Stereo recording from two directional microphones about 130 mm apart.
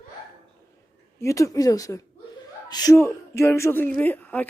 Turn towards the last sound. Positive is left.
turn(degrees=15)  # may be behind; listen again after turning